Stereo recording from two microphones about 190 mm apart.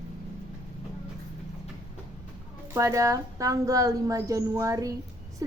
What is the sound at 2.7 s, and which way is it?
A woman's voice, 15° right (ahead or behind).